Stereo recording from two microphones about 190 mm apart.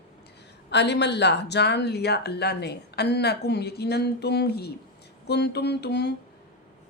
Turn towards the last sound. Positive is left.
turn(degrees=60)  # may be behind; listen again after turning